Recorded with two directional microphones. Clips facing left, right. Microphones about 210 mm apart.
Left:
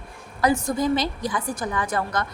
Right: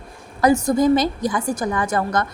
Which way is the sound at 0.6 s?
45° right (ahead or behind).